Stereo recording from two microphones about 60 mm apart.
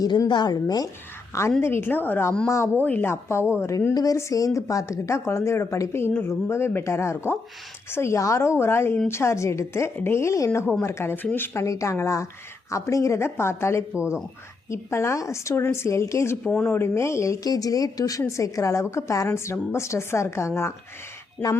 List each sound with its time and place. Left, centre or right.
0.0 s speech: left
1.3 s a woman's voice: left
1.6 s a woman's voice: left
3.1 s a woman's voice: left
4.2 s a woman's voice: left
11.1 s a woman's voice: left
11.5 s a woman's voice: left
13.9 s speech: centre
14.7 s a woman's voice: left
16.4 s speech: centre
16.6 s speech: left
18.3 s a woman's voice: left
21.4 s a woman's voice: left